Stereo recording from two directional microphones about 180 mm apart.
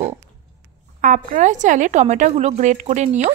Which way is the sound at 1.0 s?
50° right (ahead or behind).